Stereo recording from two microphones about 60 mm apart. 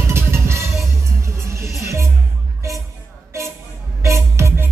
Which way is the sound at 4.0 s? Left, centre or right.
Right.